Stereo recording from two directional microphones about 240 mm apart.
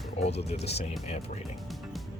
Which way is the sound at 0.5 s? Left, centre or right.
Left.